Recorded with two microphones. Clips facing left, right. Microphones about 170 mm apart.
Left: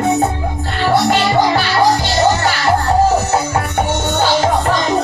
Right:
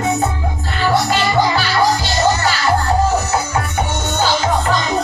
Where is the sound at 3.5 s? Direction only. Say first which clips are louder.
Left 3 dB; 55° left (ahead or behind).